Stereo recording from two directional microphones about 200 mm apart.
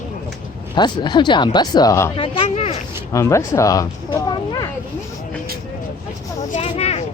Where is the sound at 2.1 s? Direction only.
25° left (ahead or behind).